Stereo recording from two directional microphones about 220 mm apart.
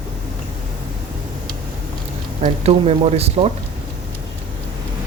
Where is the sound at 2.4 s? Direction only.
30° right (ahead or behind).